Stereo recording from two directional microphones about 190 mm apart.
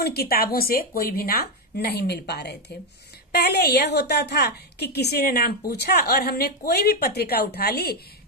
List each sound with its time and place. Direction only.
0.0 s a woman's voice: 55° left (ahead or behind)